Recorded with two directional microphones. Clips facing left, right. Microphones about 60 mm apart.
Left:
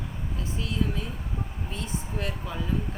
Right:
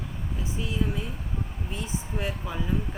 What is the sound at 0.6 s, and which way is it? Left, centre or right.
Speech, centre.